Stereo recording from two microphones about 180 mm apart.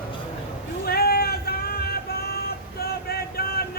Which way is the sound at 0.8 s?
60° left (ahead or behind).